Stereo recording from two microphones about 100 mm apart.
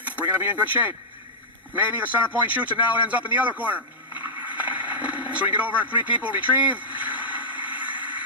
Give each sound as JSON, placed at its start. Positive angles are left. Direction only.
{"t": 0.3, "sound": "speech", "side_deg": -20}
{"t": 1.7, "sound": "a man's voice", "side_deg": -15}
{"t": 6.9, "sound": "vehicle", "side_deg": -15}
{"t": 7.6, "sound": "a sound", "side_deg": -15}